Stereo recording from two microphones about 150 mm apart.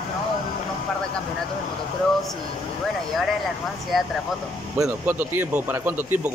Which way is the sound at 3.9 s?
Centre (ahead or behind).